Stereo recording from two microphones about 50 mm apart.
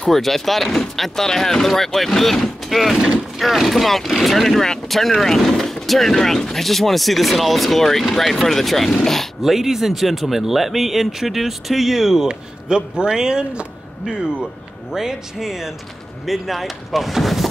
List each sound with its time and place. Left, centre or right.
0.0 s speech: centre
9.4 s speech: centre
12.3 s speech: centre